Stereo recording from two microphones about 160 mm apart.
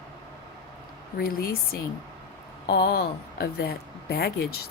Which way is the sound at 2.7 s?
75° left (ahead or behind).